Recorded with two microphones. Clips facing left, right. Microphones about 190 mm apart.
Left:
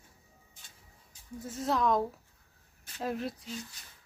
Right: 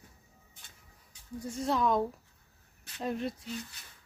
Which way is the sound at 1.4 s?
Centre (ahead or behind).